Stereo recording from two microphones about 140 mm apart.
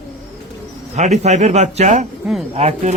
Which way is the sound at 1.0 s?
55° right (ahead or behind).